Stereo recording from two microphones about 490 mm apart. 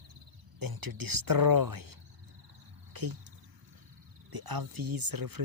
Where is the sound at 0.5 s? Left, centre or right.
Right.